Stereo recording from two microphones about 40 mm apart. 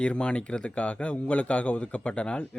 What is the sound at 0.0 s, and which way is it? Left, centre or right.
A man's voice, left.